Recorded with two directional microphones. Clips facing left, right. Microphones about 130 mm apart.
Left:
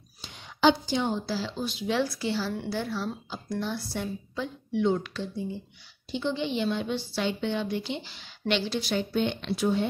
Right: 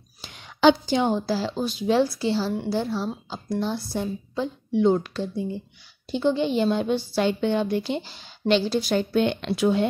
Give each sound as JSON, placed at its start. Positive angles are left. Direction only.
{"t": 0.2, "sound": "a woman's voice", "side_deg": -90}
{"t": 2.0, "sound": "a woman's voice", "side_deg": -30}
{"t": 9.1, "sound": "speech", "side_deg": -65}